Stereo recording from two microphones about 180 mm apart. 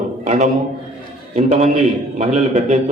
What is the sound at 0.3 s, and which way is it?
A man's voice, 40° right (ahead or behind).